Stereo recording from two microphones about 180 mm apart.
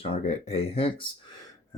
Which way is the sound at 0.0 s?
35° left (ahead or behind).